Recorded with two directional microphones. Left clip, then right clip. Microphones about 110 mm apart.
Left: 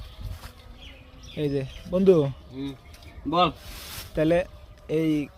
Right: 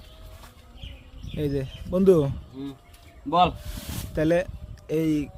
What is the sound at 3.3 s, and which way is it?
Speech, centre (ahead or behind).